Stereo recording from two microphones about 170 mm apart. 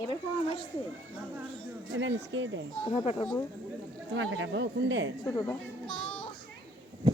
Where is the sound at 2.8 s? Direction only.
35° left (ahead or behind).